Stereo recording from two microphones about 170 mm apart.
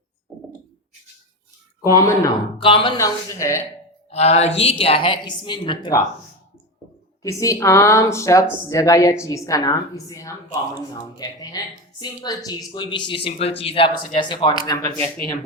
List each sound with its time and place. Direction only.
1.9 s speech: 20° left (ahead or behind)
2.6 s a woman's voice: 30° left (ahead or behind)
3.0 s a woman's voice: 15° left (ahead or behind)
4.1 s a woman's voice: 40° left (ahead or behind)
7.2 s a woman's voice: 20° left (ahead or behind)